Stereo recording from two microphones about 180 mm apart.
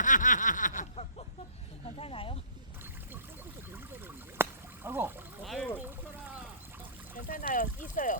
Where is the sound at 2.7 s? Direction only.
10° right (ahead or behind).